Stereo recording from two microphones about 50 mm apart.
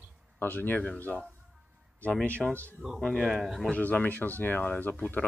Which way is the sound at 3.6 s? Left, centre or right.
Left.